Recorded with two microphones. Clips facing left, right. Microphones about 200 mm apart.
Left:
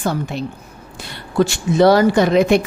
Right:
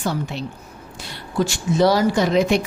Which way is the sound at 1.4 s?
60° left (ahead or behind).